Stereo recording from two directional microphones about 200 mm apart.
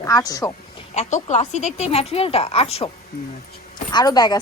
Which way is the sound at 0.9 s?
35° left (ahead or behind).